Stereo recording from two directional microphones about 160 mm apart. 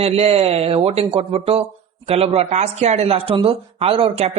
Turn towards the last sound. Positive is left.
turn(degrees=-40)  # may be behind; listen again after turning